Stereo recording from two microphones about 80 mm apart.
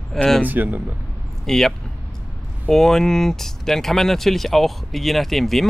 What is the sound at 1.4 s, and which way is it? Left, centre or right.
Speech, centre.